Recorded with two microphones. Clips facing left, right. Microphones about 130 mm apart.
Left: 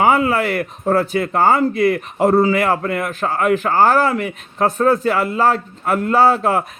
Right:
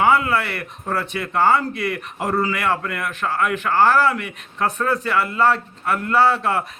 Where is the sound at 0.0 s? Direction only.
40° left (ahead or behind).